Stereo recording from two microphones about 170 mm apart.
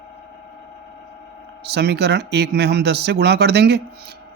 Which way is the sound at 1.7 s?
75° right (ahead or behind).